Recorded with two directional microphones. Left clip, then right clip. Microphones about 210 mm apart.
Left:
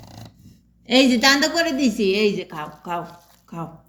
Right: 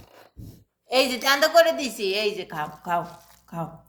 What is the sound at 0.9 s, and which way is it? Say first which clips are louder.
A woman's voice: left 5 dB; 30° right (ahead or behind).